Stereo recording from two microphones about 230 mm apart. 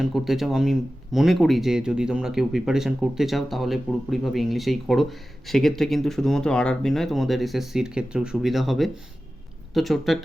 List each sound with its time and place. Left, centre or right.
0.0 s speech: centre